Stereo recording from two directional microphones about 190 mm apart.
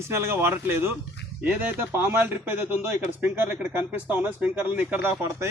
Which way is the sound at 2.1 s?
10° right (ahead or behind).